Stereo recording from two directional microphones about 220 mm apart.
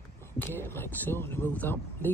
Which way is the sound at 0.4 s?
10° left (ahead or behind).